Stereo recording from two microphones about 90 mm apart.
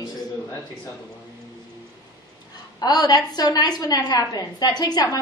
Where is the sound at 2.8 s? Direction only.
45° left (ahead or behind).